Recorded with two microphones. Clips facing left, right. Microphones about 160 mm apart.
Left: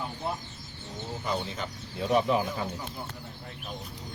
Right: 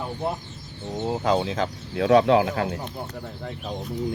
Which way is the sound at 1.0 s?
90° right.